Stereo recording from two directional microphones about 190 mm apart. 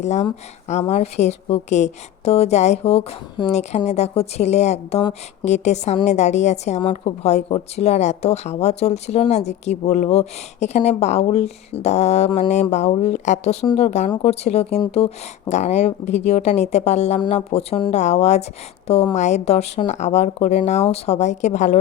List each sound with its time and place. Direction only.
0.0 s a woman's voice: 35° left (ahead or behind)